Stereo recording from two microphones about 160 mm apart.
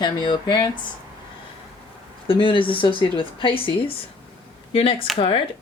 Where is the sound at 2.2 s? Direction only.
35° left (ahead or behind).